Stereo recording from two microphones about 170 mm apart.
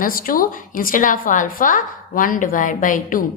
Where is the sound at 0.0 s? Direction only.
55° left (ahead or behind).